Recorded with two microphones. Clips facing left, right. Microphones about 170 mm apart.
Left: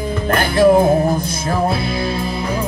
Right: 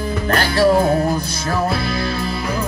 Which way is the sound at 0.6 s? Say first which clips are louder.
Left 4 dB; 20° left (ahead or behind).